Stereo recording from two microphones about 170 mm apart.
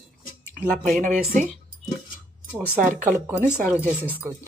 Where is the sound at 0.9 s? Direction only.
50° right (ahead or behind).